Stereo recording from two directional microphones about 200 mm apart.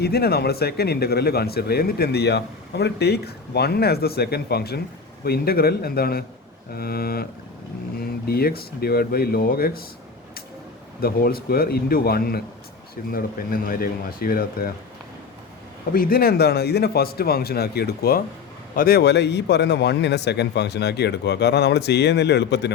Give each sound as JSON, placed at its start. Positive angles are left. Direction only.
{"t": 0.0, "sound": "speech", "side_deg": 50}
{"t": 11.0, "sound": "speech", "side_deg": 50}
{"t": 15.9, "sound": "a man's voice", "side_deg": 45}